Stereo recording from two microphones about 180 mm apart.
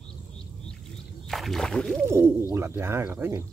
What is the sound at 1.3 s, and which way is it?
Speech, centre (ahead or behind).